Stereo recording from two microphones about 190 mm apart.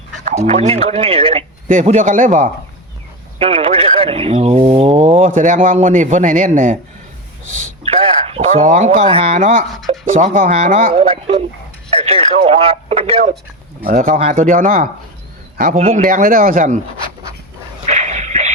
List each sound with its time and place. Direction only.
0.3 s speech: 35° right (ahead or behind)
3.3 s speech: 30° right (ahead or behind)
8.3 s speech: 40° right (ahead or behind)
13.8 s a man's voice: 50° right (ahead or behind)
17.8 s a sound: 40° right (ahead or behind)